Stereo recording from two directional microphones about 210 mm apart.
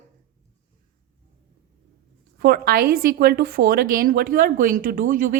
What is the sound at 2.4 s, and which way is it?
A woman's voice, 45° right (ahead or behind).